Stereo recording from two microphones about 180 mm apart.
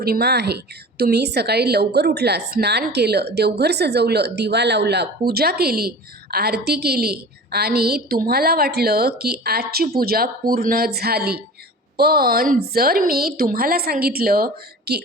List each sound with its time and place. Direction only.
0.0 s a woman's voice: 60° right (ahead or behind)